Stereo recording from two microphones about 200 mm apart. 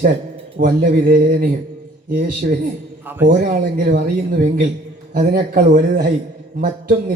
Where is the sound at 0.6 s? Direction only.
45° right (ahead or behind).